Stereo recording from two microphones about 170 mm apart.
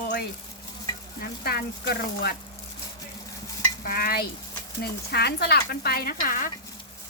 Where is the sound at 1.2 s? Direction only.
65° left (ahead or behind).